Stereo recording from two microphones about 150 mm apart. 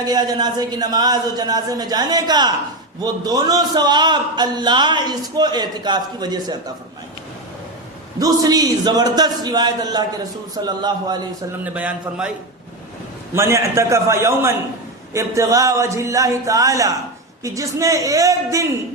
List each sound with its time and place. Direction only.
0.0 s a man's voice: 25° right (ahead or behind)
8.2 s a man's voice: 25° right (ahead or behind)
11.6 s a man's voice: 10° right (ahead or behind)
13.3 s a man's voice: 20° right (ahead or behind)